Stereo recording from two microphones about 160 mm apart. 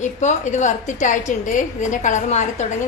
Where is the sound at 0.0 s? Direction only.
45° left (ahead or behind).